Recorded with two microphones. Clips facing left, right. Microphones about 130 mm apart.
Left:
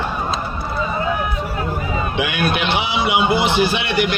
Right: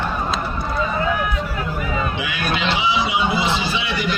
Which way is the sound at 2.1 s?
65° left (ahead or behind).